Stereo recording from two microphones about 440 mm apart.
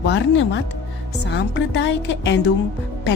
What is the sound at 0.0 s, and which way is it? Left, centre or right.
A woman's voice, left.